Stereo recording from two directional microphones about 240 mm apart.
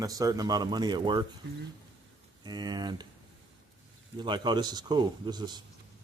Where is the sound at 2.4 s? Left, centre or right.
Centre.